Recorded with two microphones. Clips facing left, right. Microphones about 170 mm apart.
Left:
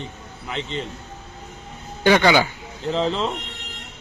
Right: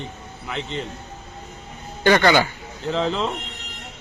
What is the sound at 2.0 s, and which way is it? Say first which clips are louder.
Speech: even; 10° left (ahead or behind).